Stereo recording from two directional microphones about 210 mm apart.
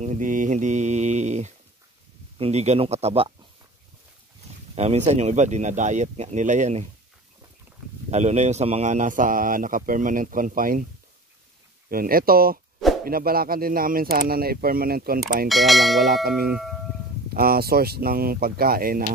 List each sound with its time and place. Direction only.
0.0 s a man's voice: 35° right (ahead or behind)
4.7 s a man's voice: 30° right (ahead or behind)
8.1 s a man's voice: 35° right (ahead or behind)
11.9 s speech: 45° right (ahead or behind)
15.4 s speech: centre (ahead or behind)
17.3 s speech: 45° right (ahead or behind)